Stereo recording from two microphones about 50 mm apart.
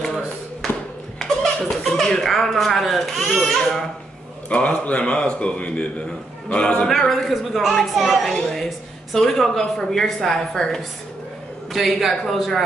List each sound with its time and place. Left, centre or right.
0.0 s a sound: centre
1.2 s speech: centre
4.5 s a man's voice: left
6.9 s a woman's voice: centre